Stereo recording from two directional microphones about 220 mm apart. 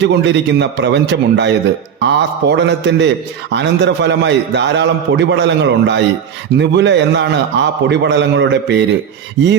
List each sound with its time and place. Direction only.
0.0 s a man's voice: 50° right (ahead or behind)